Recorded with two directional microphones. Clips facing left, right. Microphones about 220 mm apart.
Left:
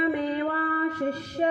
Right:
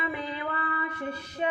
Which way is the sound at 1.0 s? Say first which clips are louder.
Left 7 dB; 40° left (ahead or behind).